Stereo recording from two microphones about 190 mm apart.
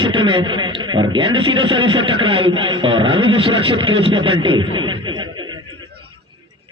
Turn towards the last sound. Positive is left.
turn(degrees=-25)  # may be behind; listen again after turning